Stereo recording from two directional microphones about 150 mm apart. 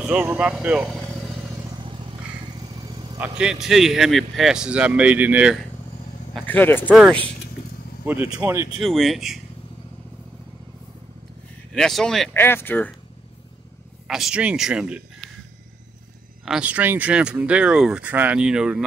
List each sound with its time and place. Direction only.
0.0 s speech: 10° right (ahead or behind)
1.6 s vehicle: 35° right (ahead or behind)
3.2 s speech: 5° right (ahead or behind)
6.4 s speech: 10° left (ahead or behind)
8.0 s speech: 15° right (ahead or behind)
8.7 s speech: centre (ahead or behind)
11.7 s speech: 5° left (ahead or behind)
12.4 s speech: 15° left (ahead or behind)
14.0 s speech: centre (ahead or behind)
16.4 s speech: 5° right (ahead or behind)